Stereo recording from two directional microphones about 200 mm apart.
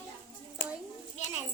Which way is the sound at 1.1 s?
35° left (ahead or behind).